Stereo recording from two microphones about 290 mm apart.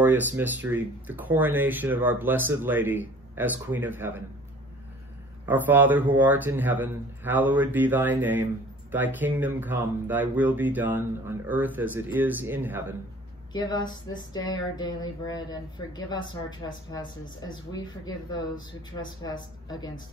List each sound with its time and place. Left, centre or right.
0.0 s speech: centre
5.5 s speech: centre
13.5 s speech: centre